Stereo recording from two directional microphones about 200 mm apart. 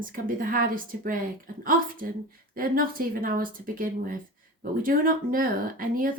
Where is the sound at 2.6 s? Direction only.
45° right (ahead or behind).